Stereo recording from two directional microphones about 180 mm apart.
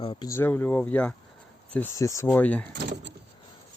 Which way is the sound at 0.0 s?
25° left (ahead or behind).